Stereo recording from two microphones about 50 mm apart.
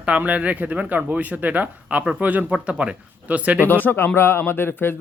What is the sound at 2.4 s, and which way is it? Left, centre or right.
Speech, right.